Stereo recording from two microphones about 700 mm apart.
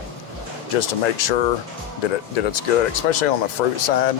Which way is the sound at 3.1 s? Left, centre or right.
Left.